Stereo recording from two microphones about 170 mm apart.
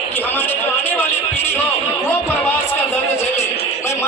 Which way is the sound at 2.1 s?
15° left (ahead or behind).